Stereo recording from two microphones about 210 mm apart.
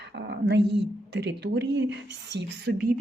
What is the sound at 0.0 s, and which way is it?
Speech, 55° right (ahead or behind).